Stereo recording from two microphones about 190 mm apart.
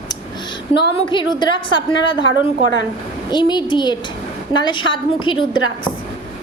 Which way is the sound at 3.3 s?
25° left (ahead or behind).